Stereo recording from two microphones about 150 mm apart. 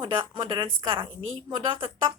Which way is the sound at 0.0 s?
30° right (ahead or behind).